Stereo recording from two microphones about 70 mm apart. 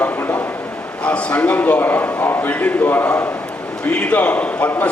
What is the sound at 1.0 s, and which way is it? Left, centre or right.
A man's voice, centre.